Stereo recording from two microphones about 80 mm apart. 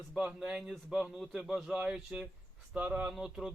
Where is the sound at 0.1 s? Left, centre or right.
Centre.